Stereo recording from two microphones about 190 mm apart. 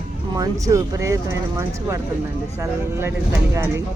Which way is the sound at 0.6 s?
15° right (ahead or behind).